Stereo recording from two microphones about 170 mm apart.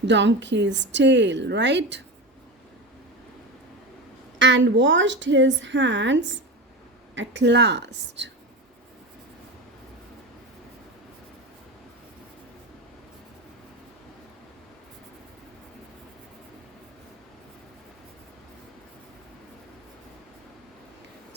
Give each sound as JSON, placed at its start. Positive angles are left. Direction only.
{"t": 0.0, "sound": "a woman's voice", "side_deg": -90}
{"t": 4.4, "sound": "a woman's voice", "side_deg": -90}